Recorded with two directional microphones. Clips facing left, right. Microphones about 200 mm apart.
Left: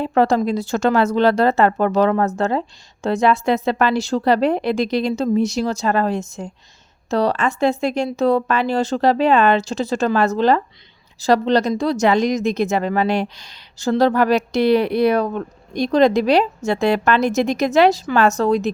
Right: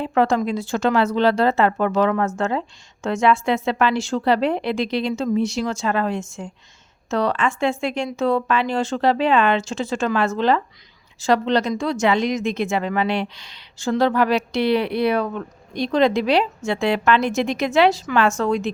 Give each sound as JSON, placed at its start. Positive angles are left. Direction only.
{"t": 0.0, "sound": "speech", "side_deg": 35}